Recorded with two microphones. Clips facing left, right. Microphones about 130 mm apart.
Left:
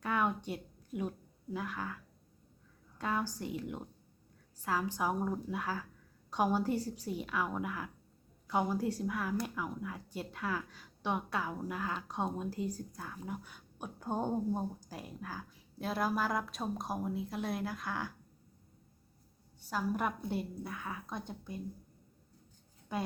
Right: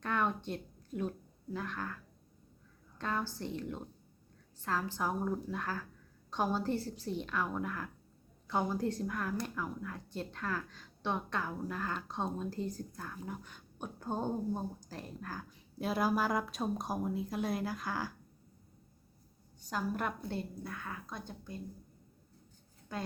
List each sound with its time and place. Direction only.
0.0 s a sound: 10° left (ahead or behind)
1.5 s a woman's voice: 10° left (ahead or behind)
3.0 s a woman's voice: 10° left (ahead or behind)
19.5 s a woman's voice: 5° left (ahead or behind)
22.9 s a woman's voice: 20° left (ahead or behind)